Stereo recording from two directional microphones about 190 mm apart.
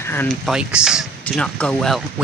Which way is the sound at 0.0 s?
10° left (ahead or behind).